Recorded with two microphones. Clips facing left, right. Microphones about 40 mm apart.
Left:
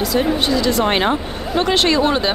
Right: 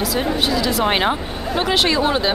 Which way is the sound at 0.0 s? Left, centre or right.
Centre.